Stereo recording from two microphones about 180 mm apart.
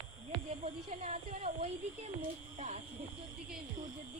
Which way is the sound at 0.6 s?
40° right (ahead or behind).